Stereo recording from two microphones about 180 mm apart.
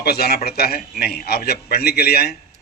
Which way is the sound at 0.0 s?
60° left (ahead or behind).